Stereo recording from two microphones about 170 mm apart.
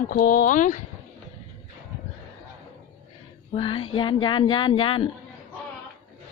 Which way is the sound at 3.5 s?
30° left (ahead or behind).